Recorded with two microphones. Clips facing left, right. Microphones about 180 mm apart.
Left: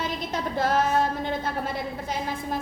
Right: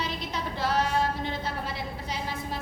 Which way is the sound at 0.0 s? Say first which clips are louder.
Left 4 dB; 50° left (ahead or behind).